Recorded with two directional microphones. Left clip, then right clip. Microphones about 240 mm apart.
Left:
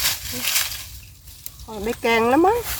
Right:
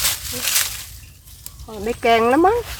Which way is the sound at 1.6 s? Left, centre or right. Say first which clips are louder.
Right 3 dB; centre.